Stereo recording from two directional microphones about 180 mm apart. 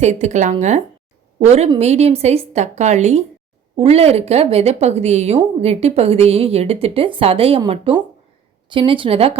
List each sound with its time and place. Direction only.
0.0 s a woman's voice: 40° right (ahead or behind)
8.7 s a woman's voice: 30° right (ahead or behind)